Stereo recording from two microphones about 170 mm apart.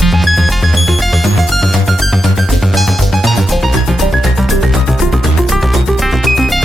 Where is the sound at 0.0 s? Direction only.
Centre (ahead or behind).